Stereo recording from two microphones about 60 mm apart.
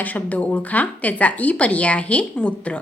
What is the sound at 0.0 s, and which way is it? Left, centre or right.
Speech, left.